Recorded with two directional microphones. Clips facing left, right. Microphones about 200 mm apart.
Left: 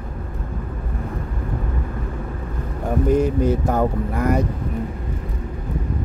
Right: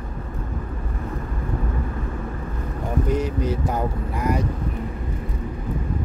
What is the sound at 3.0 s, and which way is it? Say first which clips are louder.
Speech: left 7 dB; 50° left (ahead or behind).